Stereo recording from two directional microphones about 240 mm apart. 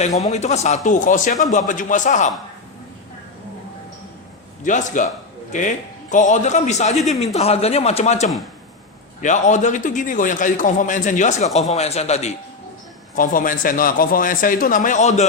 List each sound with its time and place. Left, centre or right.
0.2 s a man's voice: left
4.6 s a man's voice: left
6.9 s speech: centre
7.3 s a man's voice: left